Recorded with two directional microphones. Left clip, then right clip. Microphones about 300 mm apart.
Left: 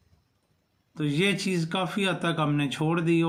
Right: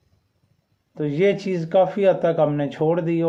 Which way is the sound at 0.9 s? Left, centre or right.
Centre.